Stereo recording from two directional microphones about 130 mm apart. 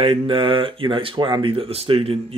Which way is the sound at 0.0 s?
45° right (ahead or behind).